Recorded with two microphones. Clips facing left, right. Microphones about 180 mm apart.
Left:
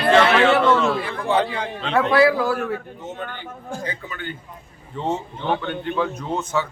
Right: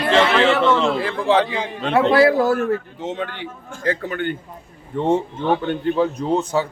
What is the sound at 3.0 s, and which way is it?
Speech, 90° right.